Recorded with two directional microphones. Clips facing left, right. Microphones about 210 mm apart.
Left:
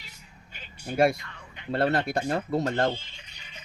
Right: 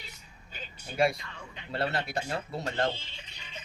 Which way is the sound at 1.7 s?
50° left (ahead or behind).